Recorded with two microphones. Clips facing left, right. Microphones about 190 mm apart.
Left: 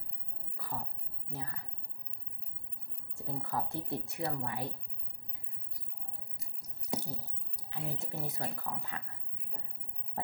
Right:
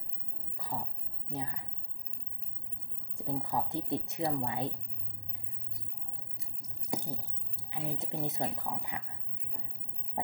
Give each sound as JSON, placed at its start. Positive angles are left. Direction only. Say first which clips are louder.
{"t": 0.5, "sound": "a sound", "louder": "right 2 dB", "side_deg": -20}
{"t": 1.3, "sound": "a woman's voice", "louder": "right 4 dB", "side_deg": -20}
{"t": 3.2, "sound": "speech", "louder": "right 3 dB", "side_deg": -20}
{"t": 6.9, "sound": "squish", "louder": "right 1 dB", "side_deg": -15}
{"t": 7.7, "sound": "speech", "louder": "right 3 dB", "side_deg": -20}